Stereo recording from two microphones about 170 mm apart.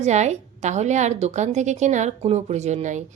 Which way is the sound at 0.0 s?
40° right (ahead or behind).